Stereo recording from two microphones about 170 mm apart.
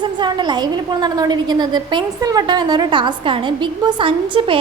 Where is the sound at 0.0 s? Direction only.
25° right (ahead or behind).